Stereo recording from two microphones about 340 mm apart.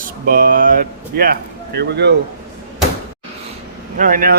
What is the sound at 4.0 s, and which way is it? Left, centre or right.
Speech, right.